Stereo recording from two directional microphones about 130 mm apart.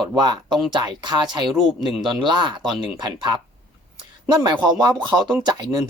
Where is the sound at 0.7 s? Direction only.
35° right (ahead or behind).